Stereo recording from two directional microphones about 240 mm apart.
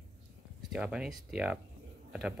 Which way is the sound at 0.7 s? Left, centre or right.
Centre.